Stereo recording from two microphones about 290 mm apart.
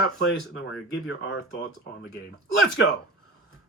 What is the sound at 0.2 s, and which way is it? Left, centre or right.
Speech, left.